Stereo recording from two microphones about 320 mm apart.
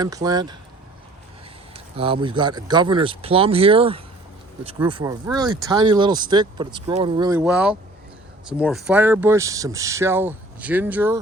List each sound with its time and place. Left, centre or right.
0.0 s speech: centre
1.7 s speech: centre